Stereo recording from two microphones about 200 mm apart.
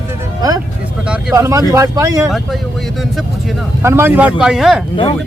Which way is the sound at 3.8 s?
10° right (ahead or behind).